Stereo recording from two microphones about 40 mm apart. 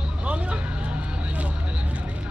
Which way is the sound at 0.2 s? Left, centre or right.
Right.